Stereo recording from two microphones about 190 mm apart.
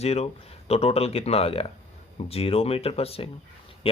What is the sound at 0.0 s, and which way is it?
Speech, 35° left (ahead or behind).